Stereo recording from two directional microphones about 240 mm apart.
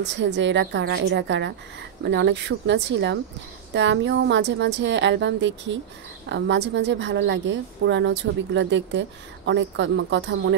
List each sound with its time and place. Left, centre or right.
0.0 s a woman's voice: right